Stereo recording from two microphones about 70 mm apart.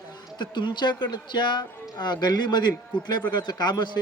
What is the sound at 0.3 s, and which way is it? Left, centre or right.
Speech, left.